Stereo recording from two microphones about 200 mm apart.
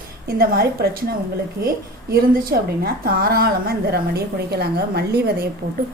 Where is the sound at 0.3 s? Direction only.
50° right (ahead or behind).